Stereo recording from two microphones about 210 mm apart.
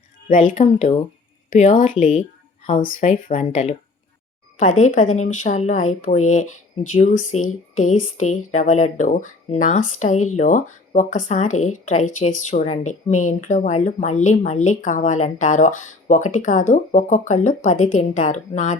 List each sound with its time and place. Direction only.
0.5 s speech: 30° left (ahead or behind)
4.8 s speech: 35° left (ahead or behind)